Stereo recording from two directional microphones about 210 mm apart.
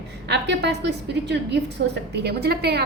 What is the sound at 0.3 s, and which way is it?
A woman's voice, 55° right (ahead or behind).